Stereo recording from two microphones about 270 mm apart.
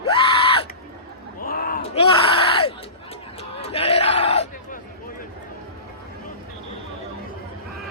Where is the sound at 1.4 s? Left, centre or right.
Left.